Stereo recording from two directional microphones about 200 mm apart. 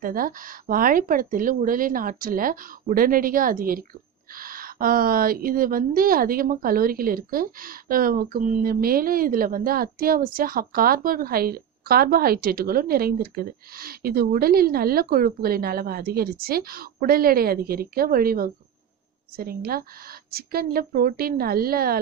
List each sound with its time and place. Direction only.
0.0 s a woman's voice: 45° right (ahead or behind)